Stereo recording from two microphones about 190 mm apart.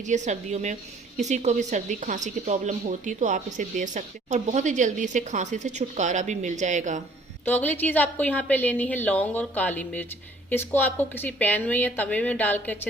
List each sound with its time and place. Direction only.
0.0 s speech: 40° right (ahead or behind)
7.4 s a woman's voice: 10° left (ahead or behind)